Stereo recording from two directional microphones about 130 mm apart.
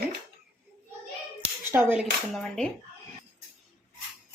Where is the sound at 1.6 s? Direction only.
15° right (ahead or behind).